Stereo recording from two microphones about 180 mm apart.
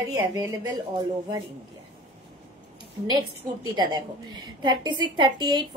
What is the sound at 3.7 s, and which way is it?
A woman's voice, 25° right (ahead or behind).